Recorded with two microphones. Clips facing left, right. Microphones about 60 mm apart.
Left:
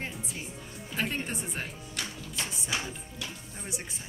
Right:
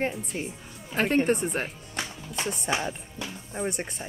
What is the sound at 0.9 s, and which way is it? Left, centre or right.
Speech, right.